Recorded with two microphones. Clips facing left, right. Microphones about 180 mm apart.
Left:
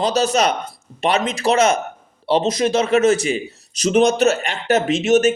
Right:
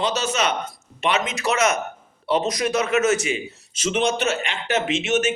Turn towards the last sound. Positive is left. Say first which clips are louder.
# left 7 dB
turn(degrees=40)  # may be behind; listen again after turning